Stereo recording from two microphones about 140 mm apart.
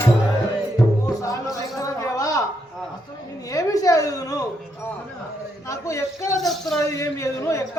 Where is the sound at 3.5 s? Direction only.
25° left (ahead or behind).